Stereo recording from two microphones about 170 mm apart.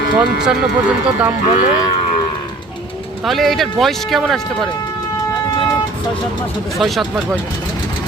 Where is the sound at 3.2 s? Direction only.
Centre (ahead or behind).